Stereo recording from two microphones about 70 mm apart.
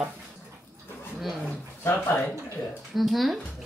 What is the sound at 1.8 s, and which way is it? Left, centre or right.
Speech, left.